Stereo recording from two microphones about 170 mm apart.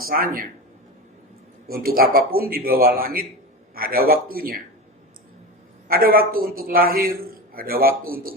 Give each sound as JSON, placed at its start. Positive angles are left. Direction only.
{"t": 0.0, "sound": "speech", "side_deg": -55}
{"t": 1.6, "sound": "a man's voice", "side_deg": -60}
{"t": 5.9, "sound": "a man's voice", "side_deg": -60}